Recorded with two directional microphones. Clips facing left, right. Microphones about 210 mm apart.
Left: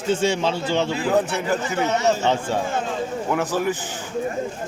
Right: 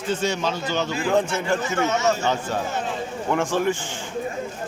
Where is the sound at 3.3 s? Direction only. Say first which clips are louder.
Right 2 dB; 5° left (ahead or behind).